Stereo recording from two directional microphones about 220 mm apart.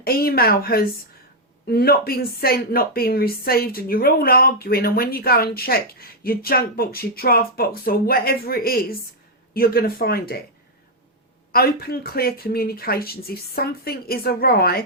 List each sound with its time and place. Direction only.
0.0 s a woman's voice: 45° left (ahead or behind)
11.5 s a woman's voice: 45° left (ahead or behind)